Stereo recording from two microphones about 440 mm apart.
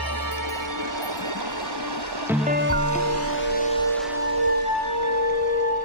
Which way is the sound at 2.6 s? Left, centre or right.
Left.